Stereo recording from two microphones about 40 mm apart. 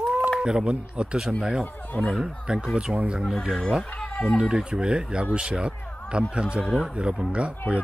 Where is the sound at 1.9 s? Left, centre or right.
Left.